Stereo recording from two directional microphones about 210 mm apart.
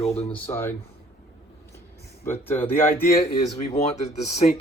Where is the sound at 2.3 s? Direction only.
10° left (ahead or behind).